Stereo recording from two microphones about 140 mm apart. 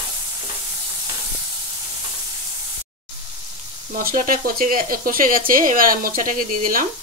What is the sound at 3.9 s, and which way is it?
Speech, 90° right.